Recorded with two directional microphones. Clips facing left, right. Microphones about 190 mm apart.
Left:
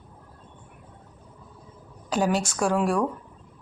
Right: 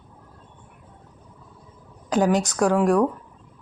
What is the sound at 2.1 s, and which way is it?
Speech, 15° right (ahead or behind).